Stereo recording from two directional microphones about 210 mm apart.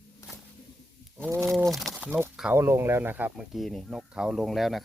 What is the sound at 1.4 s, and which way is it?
Speech, centre (ahead or behind).